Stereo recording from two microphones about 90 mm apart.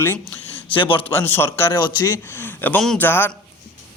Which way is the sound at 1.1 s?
20° left (ahead or behind).